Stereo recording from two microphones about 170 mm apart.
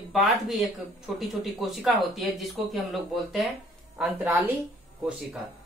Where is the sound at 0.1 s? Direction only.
Centre (ahead or behind).